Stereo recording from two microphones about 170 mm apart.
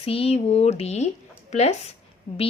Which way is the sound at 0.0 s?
35° left (ahead or behind).